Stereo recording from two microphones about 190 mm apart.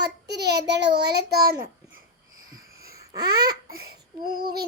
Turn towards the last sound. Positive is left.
turn(degrees=-55)  # may be behind; listen again after turning